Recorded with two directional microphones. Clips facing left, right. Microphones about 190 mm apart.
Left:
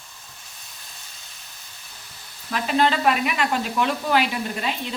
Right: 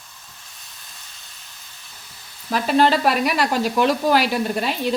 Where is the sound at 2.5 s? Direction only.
40° right (ahead or behind).